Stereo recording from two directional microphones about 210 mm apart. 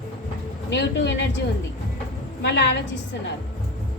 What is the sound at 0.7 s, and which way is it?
Speech, 55° left (ahead or behind).